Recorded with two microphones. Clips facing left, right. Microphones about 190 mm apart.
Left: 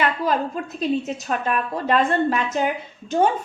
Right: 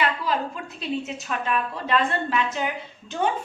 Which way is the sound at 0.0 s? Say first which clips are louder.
Left 3 dB; 45° left (ahead or behind).